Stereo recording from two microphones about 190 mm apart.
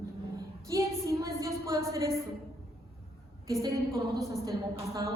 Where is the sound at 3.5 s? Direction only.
15° right (ahead or behind).